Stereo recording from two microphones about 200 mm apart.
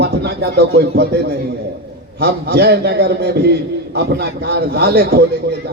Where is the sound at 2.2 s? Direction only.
55° right (ahead or behind).